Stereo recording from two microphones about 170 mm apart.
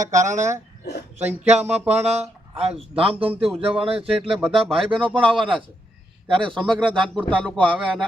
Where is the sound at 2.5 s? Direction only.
35° right (ahead or behind).